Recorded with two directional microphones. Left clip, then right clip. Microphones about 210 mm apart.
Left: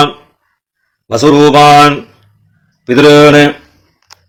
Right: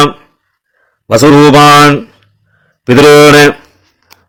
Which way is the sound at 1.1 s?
35° right (ahead or behind).